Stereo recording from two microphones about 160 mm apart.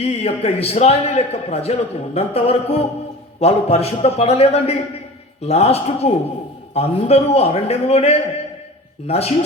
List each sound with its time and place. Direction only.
0.0 s a man's voice: 40° left (ahead or behind)